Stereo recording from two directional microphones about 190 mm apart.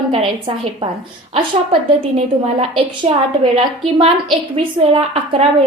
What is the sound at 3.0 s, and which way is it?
Speech, 30° right (ahead or behind).